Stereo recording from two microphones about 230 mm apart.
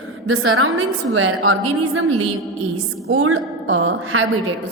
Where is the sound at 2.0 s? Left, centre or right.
Right.